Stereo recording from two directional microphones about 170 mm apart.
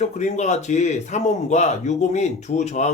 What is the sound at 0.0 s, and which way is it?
Speech, 45° left (ahead or behind).